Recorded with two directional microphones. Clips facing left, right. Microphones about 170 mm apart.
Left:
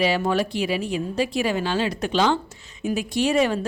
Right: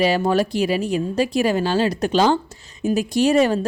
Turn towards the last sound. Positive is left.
turn(degrees=-40)  # may be behind; listen again after turning